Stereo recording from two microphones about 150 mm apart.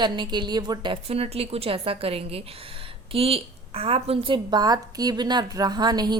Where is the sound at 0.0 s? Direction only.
30° right (ahead or behind).